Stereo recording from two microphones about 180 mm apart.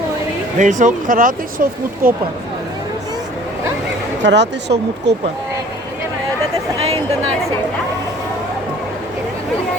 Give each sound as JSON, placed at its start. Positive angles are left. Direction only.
{"t": 0.6, "sound": "speech", "side_deg": -45}
{"t": 4.2, "sound": "speech", "side_deg": -75}